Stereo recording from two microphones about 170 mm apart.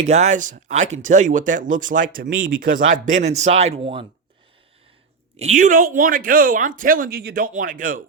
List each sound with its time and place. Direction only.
0.0 s speech: 40° right (ahead or behind)
5.4 s speech: 45° right (ahead or behind)